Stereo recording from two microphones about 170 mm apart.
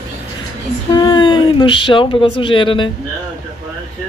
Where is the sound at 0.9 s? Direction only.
30° left (ahead or behind).